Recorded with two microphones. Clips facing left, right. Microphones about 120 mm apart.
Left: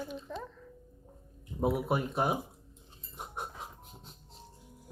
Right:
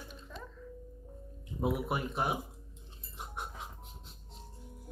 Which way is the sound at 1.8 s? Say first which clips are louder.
Left 3 dB; 40° left (ahead or behind).